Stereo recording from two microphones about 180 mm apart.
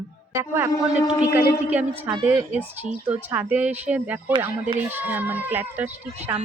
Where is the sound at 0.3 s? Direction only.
15° right (ahead or behind).